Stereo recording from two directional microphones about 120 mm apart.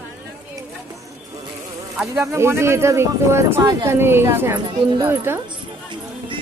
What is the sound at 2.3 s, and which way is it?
Speech, 20° right (ahead or behind).